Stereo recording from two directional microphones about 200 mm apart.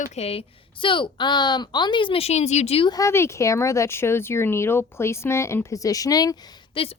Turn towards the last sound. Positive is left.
turn(degrees=25)  # may be behind; listen again after turning